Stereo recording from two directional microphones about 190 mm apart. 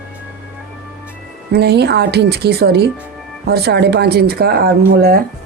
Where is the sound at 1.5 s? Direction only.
60° right (ahead or behind).